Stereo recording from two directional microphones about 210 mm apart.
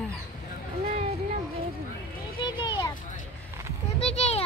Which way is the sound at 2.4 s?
20° left (ahead or behind).